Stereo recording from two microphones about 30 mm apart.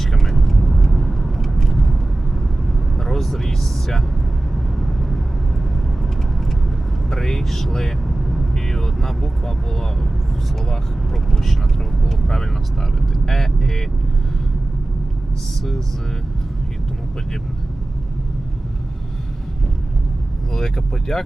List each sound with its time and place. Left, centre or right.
0.0 s vehicle: centre
4.5 s vehicle: centre
7.1 s vehicle: centre
7.4 s a sound: centre
7.7 s vehicle: centre
8.0 s vehicle: centre
8.5 s vehicle: centre
11.1 s vehicle: centre
20.5 s vehicle: centre